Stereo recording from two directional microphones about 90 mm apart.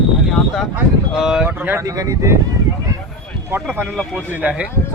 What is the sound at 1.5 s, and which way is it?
Speech, 25° right (ahead or behind).